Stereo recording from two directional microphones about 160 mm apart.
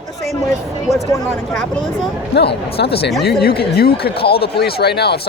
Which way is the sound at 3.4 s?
75° left (ahead or behind).